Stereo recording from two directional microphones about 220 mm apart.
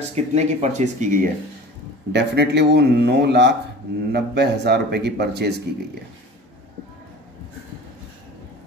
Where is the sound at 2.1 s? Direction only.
50° right (ahead or behind).